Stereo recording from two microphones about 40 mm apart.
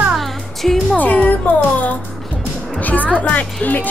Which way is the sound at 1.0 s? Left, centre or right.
Left.